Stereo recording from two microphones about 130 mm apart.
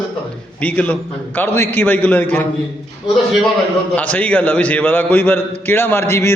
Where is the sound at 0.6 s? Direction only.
10° left (ahead or behind).